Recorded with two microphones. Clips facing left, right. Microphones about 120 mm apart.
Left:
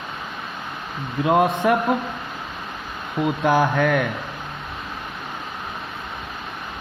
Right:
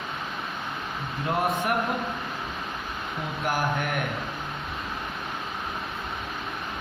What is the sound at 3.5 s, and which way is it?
Speech, 90° left.